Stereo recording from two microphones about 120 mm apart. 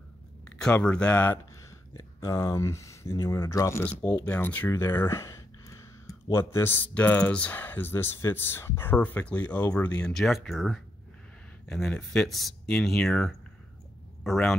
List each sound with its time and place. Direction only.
0.5 s speech: 10° left (ahead or behind)
2.0 s speech: 25° left (ahead or behind)
3.8 s speech: 10° left (ahead or behind)